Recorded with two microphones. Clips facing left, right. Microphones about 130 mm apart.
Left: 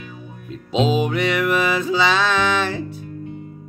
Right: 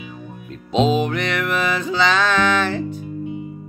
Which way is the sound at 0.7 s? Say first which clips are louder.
Right 1 dB; 5° left (ahead or behind).